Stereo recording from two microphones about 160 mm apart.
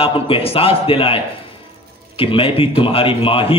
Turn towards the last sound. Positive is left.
turn(degrees=35)  # may be behind; listen again after turning